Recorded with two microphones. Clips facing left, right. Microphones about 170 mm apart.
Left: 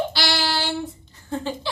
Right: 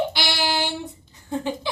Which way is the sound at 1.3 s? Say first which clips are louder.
Right 1 dB; 15° right (ahead or behind).